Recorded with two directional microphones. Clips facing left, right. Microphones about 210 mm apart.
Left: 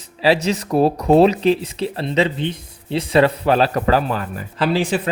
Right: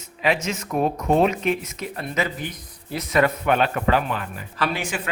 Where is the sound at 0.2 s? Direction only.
35° left (ahead or behind).